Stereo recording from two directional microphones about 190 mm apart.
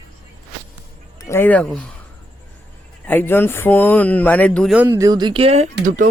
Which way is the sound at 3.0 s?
10° left (ahead or behind).